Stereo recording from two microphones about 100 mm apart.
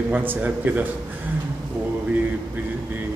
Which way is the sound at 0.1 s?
20° right (ahead or behind).